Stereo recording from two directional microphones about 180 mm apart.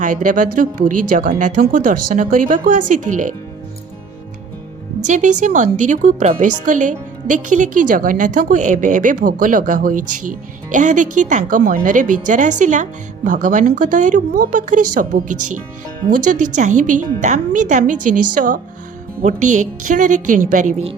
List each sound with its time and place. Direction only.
0.0 s speech: 45° right (ahead or behind)
5.0 s speech: 40° right (ahead or behind)